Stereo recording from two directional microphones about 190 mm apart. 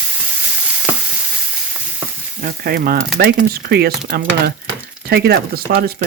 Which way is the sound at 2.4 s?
50° right (ahead or behind).